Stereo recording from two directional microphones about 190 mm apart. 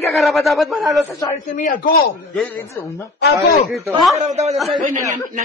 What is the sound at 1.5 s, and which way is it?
Speech, 45° left (ahead or behind).